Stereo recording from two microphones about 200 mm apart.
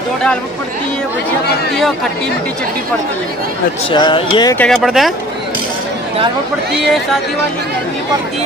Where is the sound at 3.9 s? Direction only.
25° left (ahead or behind).